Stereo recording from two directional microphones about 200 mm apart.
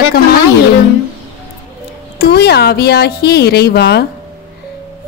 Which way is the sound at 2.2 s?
55° left (ahead or behind).